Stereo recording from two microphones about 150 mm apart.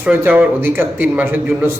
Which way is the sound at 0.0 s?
10° right (ahead or behind).